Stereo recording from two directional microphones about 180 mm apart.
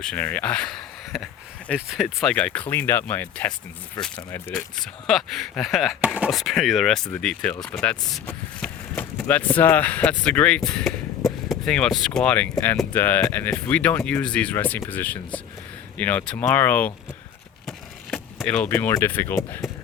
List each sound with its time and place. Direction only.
0.0 s speech: 5° left (ahead or behind)
12.5 s speech: 20° left (ahead or behind)